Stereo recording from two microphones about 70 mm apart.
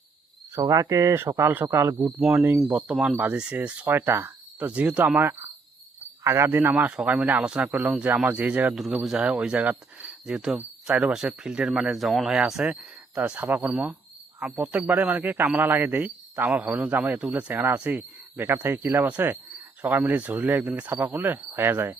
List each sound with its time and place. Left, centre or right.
0.6 s speech: right
1.4 s speech: right
1.6 s speech: right
2.0 s speech: right
3.9 s speech: right
4.6 s speech: centre
6.2 s speech: right